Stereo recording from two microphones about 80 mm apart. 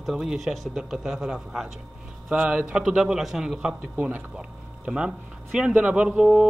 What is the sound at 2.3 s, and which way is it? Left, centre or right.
Speech, right.